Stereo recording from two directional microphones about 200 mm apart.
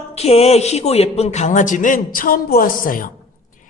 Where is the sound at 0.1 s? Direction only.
30° left (ahead or behind).